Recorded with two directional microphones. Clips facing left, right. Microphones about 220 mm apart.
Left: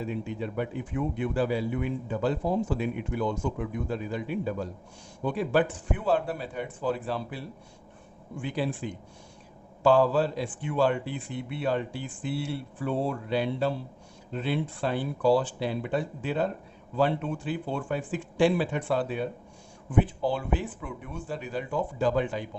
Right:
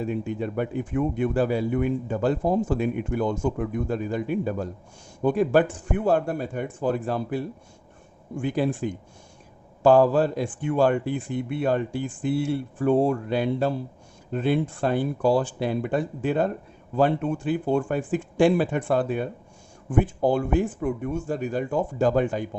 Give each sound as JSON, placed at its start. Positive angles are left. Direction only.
{"t": 0.0, "sound": "speech", "side_deg": -50}